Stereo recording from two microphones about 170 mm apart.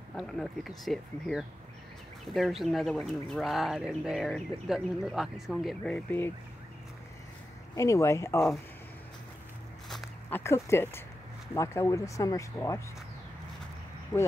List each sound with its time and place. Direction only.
0.1 s speech: centre (ahead or behind)
7.7 s speech: 15° left (ahead or behind)
10.3 s speech: 15° left (ahead or behind)
14.1 s speech: 25° left (ahead or behind)